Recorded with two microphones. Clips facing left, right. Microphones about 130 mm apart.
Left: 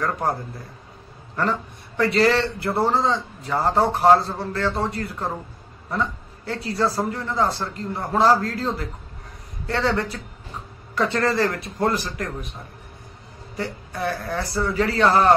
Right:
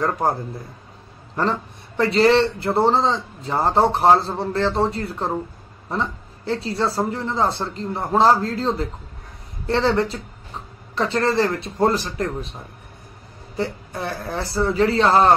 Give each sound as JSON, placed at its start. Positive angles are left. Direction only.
{"t": 0.0, "sound": "a man's voice", "side_deg": -25}
{"t": 13.6, "sound": "a man's voice", "side_deg": -25}